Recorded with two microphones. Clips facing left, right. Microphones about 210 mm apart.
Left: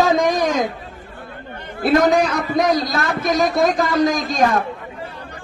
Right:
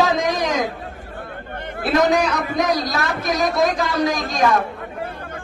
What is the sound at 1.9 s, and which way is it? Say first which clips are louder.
Speech: left 1 dB; 50° left (ahead or behind).